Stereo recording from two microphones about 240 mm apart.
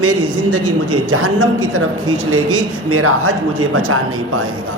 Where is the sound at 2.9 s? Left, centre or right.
Right.